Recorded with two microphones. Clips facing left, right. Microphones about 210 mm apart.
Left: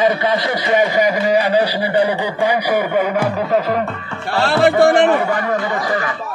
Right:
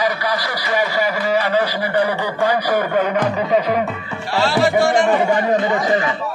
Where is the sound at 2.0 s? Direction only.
15° left (ahead or behind); by 3.8 s centre (ahead or behind).